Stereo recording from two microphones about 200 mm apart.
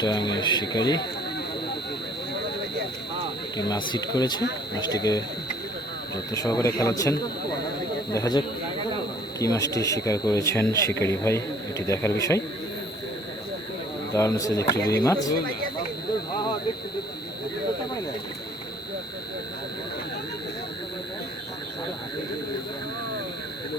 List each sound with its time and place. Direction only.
0.0 s speech: 20° left (ahead or behind)
3.7 s speech: 20° left (ahead or behind)
6.3 s speech: 15° left (ahead or behind)
14.1 s speech: 15° left (ahead or behind)